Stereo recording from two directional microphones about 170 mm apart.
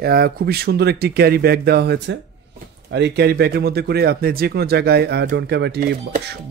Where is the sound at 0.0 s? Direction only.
65° right (ahead or behind).